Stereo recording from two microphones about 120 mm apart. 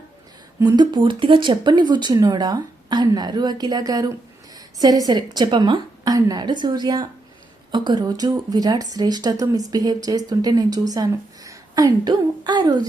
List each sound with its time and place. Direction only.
0.8 s speech: 35° right (ahead or behind)